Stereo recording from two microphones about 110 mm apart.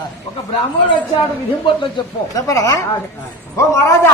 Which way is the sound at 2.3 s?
30° left (ahead or behind).